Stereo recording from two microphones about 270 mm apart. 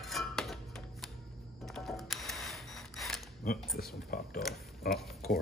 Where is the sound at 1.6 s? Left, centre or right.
Centre.